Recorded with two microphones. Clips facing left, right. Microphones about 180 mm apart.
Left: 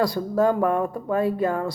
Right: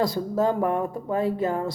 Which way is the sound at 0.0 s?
20° right (ahead or behind).